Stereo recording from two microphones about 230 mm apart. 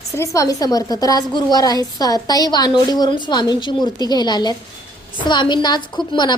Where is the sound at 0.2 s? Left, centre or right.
Centre.